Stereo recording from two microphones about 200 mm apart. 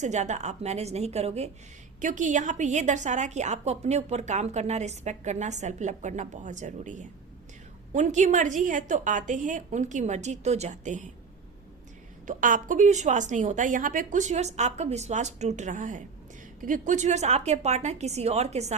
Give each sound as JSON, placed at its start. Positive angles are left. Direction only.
{"t": 0.0, "sound": "a woman's voice", "side_deg": -35}
{"t": 12.2, "sound": "a woman's voice", "side_deg": -40}